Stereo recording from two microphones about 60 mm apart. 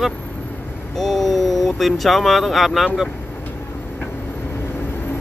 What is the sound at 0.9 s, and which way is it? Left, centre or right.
Speech, centre.